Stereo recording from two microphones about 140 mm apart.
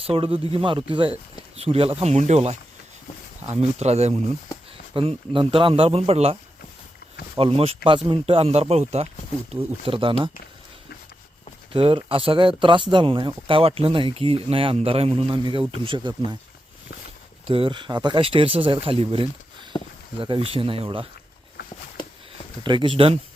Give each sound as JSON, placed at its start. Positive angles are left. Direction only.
{"t": 0.0, "sound": "speech", "side_deg": -45}
{"t": 4.9, "sound": "speech", "side_deg": -40}
{"t": 7.3, "sound": "speech", "side_deg": -45}
{"t": 11.7, "sound": "speech", "side_deg": -40}
{"t": 17.5, "sound": "speech", "side_deg": -40}
{"t": 19.7, "sound": "speech", "side_deg": 35}
{"t": 20.1, "sound": "speech", "side_deg": -40}
{"t": 22.6, "sound": "speech", "side_deg": -35}